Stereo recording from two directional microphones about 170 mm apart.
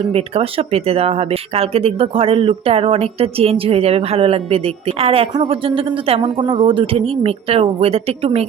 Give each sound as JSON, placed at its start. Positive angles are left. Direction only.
{"t": 0.1, "sound": "speech", "side_deg": -35}